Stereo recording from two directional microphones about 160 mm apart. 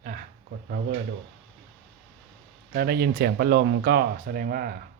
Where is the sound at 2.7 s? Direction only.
80° right.